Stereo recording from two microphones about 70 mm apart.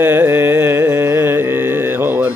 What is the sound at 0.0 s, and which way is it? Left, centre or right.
Music, right.